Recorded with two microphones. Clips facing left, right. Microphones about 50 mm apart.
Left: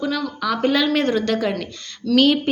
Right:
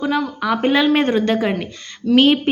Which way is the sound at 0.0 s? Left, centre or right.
Right.